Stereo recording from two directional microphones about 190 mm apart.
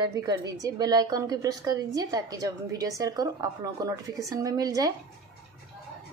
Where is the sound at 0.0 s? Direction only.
20° right (ahead or behind).